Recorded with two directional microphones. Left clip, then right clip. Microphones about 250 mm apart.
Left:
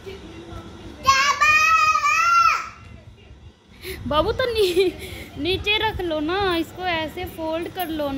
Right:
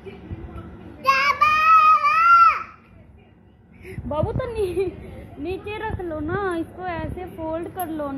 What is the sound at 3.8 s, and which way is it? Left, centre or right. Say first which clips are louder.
A woman's voice: left 5 dB; left.